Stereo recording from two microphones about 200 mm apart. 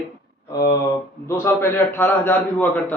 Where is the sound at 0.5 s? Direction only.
20° left (ahead or behind).